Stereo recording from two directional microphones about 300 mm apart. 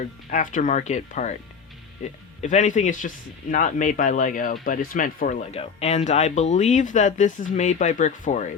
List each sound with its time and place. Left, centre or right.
0.3 s speech: left
2.4 s speech: left